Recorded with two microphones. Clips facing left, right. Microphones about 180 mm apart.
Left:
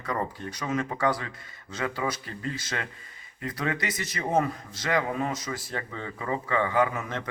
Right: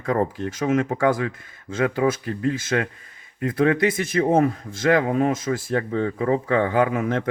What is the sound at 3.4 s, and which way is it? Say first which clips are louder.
A man's voice: right 11 dB; 55° right (ahead or behind).